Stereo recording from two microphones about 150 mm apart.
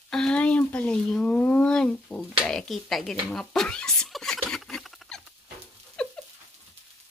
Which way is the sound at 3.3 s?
5° left (ahead or behind).